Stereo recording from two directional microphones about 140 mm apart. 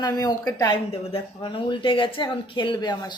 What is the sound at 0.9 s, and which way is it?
A woman's voice, 40° left (ahead or behind).